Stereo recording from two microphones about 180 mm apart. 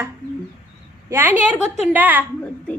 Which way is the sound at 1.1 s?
10° right (ahead or behind).